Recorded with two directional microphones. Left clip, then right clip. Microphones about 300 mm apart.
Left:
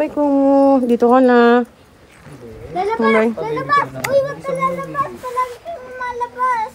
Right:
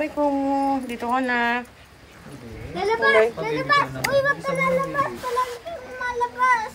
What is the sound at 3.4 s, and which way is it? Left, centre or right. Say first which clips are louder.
Speech: left 4 dB; centre.